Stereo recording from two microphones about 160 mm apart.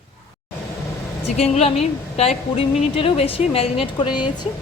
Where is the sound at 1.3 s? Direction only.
40° left (ahead or behind).